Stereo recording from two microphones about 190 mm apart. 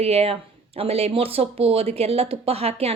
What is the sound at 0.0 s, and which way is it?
Speech, 30° right (ahead or behind).